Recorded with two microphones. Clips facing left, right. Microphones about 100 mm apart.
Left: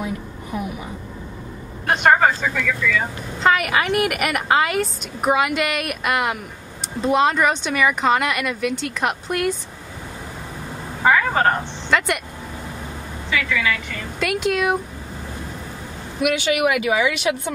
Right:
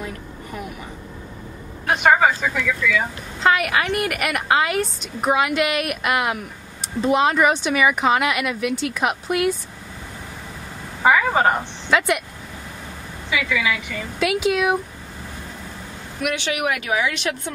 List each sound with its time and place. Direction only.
1.9 s a woman's voice: centre (ahead or behind)
11.0 s a sound: 5° right (ahead or behind)
13.3 s a woman's voice: 15° right (ahead or behind)
14.2 s a woman's voice: centre (ahead or behind)
16.2 s a woman's voice: 5° left (ahead or behind)
16.7 s speech: 70° left (ahead or behind)